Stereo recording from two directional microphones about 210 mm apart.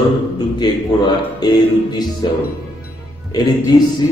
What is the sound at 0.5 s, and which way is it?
Speech, 20° left (ahead or behind).